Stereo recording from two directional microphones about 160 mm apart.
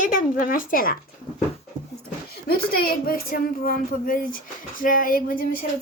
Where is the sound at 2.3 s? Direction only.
70° left (ahead or behind).